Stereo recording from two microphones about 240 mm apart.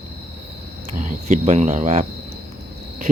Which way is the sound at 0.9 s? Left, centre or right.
Right.